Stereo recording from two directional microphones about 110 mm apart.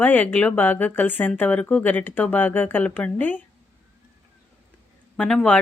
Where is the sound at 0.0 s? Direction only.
15° left (ahead or behind).